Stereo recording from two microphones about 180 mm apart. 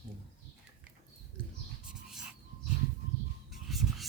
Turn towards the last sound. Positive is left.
turn(degrees=0)  # may be behind; listen again after turning